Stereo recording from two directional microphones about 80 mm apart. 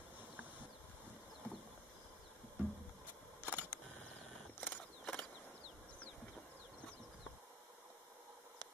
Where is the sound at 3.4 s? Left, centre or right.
Right.